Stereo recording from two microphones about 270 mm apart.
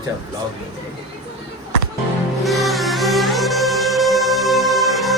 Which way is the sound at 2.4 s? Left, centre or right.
Centre.